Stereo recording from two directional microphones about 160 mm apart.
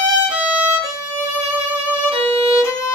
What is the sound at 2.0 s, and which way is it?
Violin, 35° right (ahead or behind).